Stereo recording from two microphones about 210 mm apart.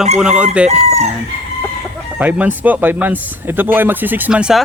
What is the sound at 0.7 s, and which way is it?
Chicken, 30° right (ahead or behind).